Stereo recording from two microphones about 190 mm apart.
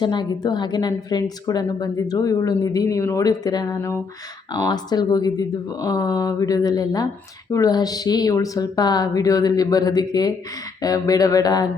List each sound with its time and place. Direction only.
0.0 s a woman's voice: 25° left (ahead or behind)